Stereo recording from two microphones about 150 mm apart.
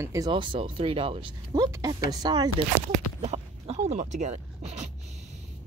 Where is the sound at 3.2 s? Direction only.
45° right (ahead or behind).